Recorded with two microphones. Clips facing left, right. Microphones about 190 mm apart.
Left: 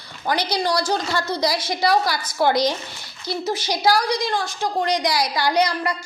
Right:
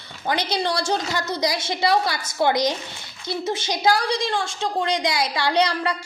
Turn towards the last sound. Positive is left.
turn(degrees=-30)  # may be behind; listen again after turning